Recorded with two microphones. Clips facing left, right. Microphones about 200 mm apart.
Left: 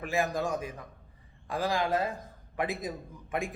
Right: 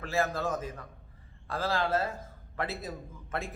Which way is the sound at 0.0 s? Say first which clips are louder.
Left 1 dB; 15° left (ahead or behind).